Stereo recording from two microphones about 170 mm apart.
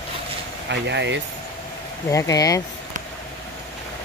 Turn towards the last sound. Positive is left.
turn(degrees=20)  # may be behind; listen again after turning